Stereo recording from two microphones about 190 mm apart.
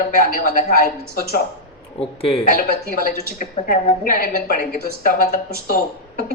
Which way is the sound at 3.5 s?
40° left (ahead or behind).